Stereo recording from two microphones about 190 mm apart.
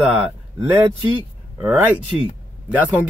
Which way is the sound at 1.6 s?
10° right (ahead or behind).